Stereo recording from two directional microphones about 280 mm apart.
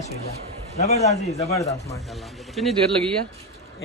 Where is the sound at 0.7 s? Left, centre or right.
Left.